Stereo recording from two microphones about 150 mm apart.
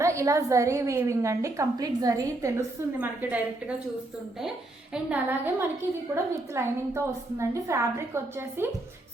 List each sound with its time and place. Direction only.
0.0 s a woman's voice: 20° right (ahead or behind)
4.9 s a woman's voice: 10° right (ahead or behind)